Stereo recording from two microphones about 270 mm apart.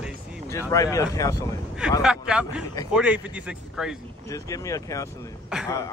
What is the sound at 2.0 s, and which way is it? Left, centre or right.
Speech, centre.